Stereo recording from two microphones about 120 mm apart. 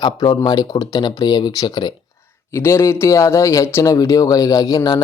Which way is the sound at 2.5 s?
20° left (ahead or behind).